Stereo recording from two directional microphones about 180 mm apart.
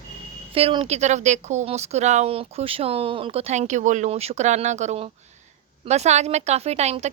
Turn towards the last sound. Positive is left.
turn(degrees=-35)  # may be behind; listen again after turning